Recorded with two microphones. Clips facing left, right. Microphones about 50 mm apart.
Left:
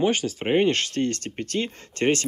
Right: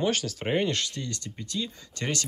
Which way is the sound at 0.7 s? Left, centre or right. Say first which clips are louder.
Left 8 dB; left.